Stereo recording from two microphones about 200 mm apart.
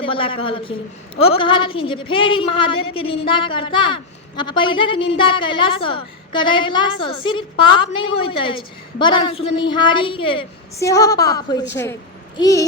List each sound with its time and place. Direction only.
0.0 s a woman's voice: 25° left (ahead or behind)
10.8 s a woman's voice: 15° left (ahead or behind)